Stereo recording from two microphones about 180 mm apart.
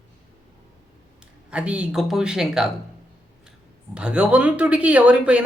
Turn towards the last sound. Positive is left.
turn(degrees=-5)  # may be behind; listen again after turning